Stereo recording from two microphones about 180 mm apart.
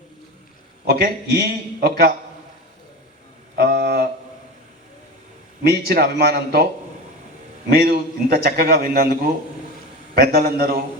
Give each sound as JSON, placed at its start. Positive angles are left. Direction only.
{"t": 0.9, "sound": "a man's voice", "side_deg": -60}
{"t": 3.5, "sound": "a sound", "side_deg": -55}
{"t": 5.6, "sound": "a man's voice", "side_deg": -65}
{"t": 7.7, "sound": "a man's voice", "side_deg": -60}
{"t": 10.2, "sound": "a man's voice", "side_deg": -60}